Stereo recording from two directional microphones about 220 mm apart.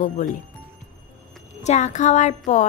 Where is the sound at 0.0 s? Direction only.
35° left (ahead or behind).